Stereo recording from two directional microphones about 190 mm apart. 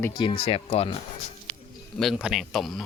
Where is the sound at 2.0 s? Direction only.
Centre (ahead or behind).